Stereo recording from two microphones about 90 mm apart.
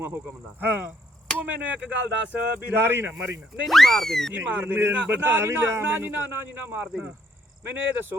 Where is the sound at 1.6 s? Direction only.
15° right (ahead or behind).